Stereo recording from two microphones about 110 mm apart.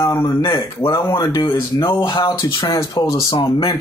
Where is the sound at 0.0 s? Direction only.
35° left (ahead or behind).